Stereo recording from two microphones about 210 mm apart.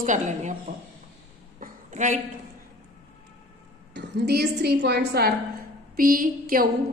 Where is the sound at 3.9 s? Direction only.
55° right (ahead or behind).